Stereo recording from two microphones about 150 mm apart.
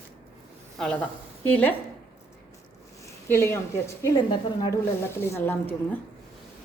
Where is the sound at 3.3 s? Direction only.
15° left (ahead or behind).